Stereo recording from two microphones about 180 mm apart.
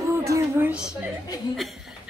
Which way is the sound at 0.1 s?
15° right (ahead or behind).